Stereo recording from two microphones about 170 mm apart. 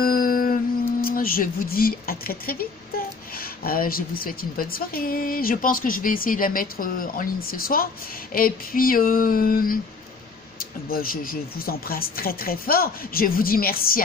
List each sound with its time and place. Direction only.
0.0 s music: 60° left (ahead or behind)
1.0 s a woman's voice: 60° left (ahead or behind)